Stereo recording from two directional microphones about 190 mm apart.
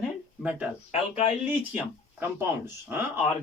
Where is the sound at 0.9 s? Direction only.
35° left (ahead or behind).